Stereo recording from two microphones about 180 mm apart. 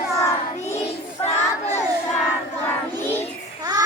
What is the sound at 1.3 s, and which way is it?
Crowd, 15° left (ahead or behind).